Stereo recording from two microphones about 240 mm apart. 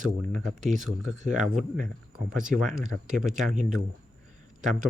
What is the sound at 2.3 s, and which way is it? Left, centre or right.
Speech, centre.